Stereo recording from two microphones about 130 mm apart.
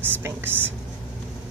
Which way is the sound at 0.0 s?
15° right (ahead or behind).